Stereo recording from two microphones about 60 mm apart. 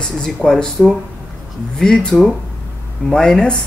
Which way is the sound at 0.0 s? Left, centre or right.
Centre.